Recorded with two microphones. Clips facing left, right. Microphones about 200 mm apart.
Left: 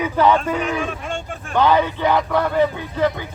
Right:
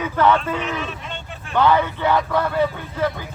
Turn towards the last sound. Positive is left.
turn(degrees=15)  # may be behind; listen again after turning